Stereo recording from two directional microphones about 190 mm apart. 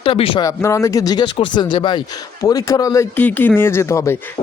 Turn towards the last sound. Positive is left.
turn(degrees=15)  # may be behind; listen again after turning